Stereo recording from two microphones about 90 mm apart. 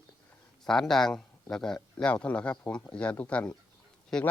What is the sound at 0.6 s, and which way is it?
Speech, 5° left (ahead or behind).